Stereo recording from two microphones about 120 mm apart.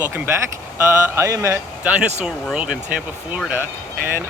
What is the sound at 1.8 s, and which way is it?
Speech, 10° right (ahead or behind).